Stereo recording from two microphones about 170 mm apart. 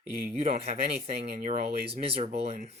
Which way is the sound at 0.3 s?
40° right (ahead or behind).